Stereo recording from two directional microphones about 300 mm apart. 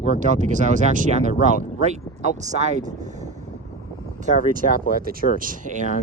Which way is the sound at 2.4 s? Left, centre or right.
Right.